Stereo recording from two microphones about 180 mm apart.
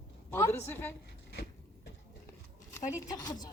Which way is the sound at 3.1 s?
20° left (ahead or behind).